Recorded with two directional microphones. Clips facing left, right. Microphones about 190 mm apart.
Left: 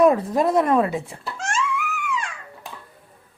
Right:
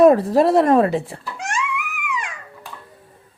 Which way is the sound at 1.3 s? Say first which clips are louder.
Even; 15° right (ahead or behind).